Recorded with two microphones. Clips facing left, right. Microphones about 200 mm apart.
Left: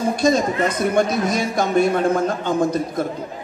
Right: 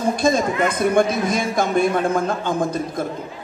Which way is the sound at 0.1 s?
50° right (ahead or behind).